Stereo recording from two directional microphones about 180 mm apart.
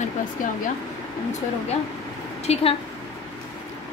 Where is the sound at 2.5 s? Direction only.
35° left (ahead or behind).